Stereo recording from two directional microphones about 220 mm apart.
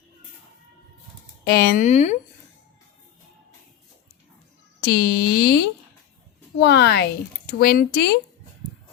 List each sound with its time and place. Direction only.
1.5 s speech: 40° left (ahead or behind)
4.9 s speech: 45° left (ahead or behind)